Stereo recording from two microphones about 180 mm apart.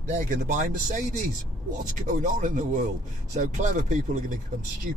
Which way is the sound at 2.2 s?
45° right (ahead or behind).